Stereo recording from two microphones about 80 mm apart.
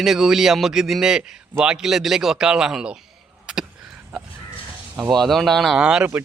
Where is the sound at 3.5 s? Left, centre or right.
Centre.